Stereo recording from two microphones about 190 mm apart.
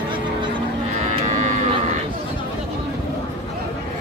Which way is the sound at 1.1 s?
40° right (ahead or behind).